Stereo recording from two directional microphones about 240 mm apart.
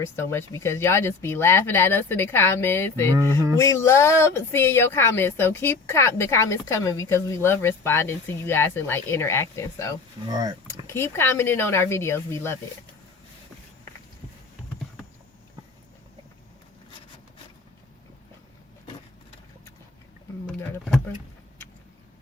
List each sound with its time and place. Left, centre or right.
0.0 s speech: centre
10.2 s speech: centre
10.8 s speech: centre
20.5 s speech: centre